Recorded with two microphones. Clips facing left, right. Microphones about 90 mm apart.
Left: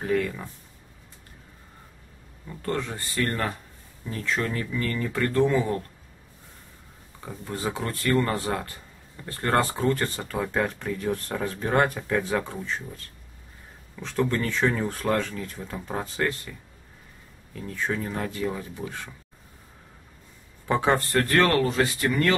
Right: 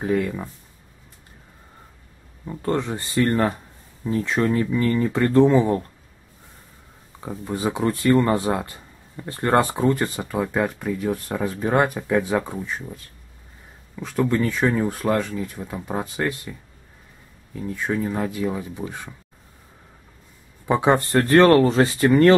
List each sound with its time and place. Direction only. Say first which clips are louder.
0.0 s speech: right 3 dB; 15° right (ahead or behind)
2.4 s speech: right 6 dB; 25° right (ahead or behind)
7.2 s speech: right 6 dB; 15° right (ahead or behind)
17.6 s speech: right 4 dB; 10° right (ahead or behind)
20.6 s speech: right 4 dB; 15° right (ahead or behind); by 22.3 s 30° right (ahead or behind)